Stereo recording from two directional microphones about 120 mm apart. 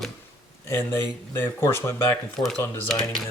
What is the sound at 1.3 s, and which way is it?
Speech, 20° left (ahead or behind).